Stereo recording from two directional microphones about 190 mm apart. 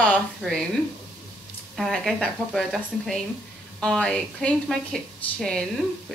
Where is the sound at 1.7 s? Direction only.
Centre (ahead or behind).